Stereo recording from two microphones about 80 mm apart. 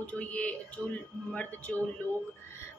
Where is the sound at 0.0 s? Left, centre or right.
Centre.